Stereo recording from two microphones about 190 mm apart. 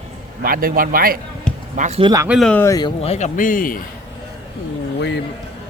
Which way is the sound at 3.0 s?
35° left (ahead or behind).